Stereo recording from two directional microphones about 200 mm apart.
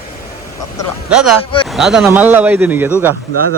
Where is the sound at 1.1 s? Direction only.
5° right (ahead or behind).